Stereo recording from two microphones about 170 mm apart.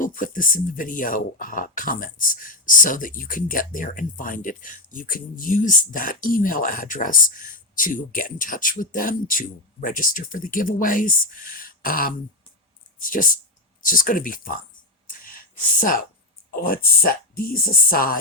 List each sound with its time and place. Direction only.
0.0 s speech: 50° left (ahead or behind)
15.0 s a sound: 55° left (ahead or behind)
16.6 s speech: 60° left (ahead or behind)